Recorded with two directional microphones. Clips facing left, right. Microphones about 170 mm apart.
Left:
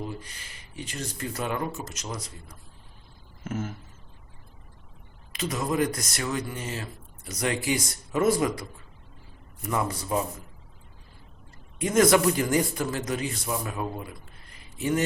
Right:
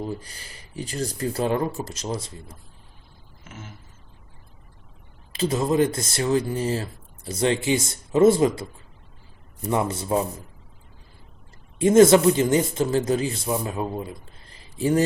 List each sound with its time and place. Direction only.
0.0 s speech: 35° right (ahead or behind)
3.4 s a sound: 45° left (ahead or behind)
5.3 s a man's voice: 30° right (ahead or behind)
11.8 s a man's voice: 30° right (ahead or behind)